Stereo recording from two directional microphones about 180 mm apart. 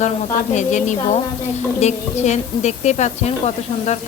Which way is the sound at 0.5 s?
40° left (ahead or behind).